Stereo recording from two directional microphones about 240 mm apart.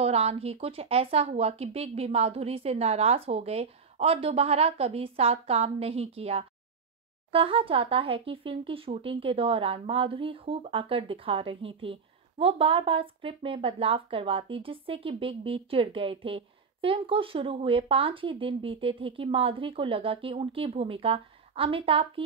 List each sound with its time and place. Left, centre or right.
0.0 s speech: right